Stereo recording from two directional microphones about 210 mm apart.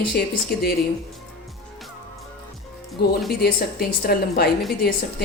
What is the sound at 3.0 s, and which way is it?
A woman's voice, 50° left (ahead or behind).